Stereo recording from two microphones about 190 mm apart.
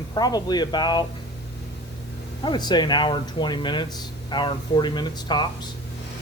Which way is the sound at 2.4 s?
25° left (ahead or behind).